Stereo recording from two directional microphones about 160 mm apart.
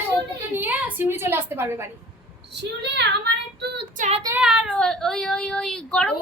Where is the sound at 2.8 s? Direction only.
90° right.